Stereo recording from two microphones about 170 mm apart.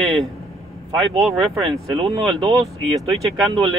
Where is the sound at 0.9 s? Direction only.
30° right (ahead or behind).